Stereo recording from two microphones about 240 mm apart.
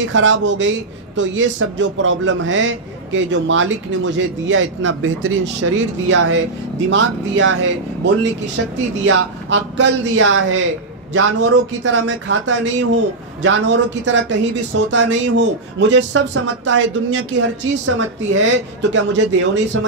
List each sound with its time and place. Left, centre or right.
0.0 s a man's voice: right